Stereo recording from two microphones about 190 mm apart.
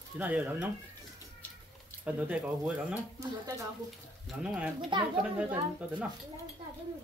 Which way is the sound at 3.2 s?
15° right (ahead or behind).